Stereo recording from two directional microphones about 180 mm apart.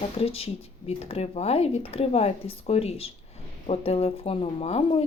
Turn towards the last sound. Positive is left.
turn(degrees=30)  # may be behind; listen again after turning